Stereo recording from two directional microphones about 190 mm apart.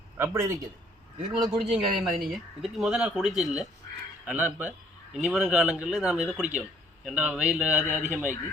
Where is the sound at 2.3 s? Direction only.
Centre (ahead or behind).